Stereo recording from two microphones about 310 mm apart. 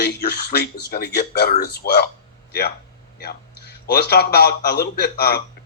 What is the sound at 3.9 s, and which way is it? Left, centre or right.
Speech, left.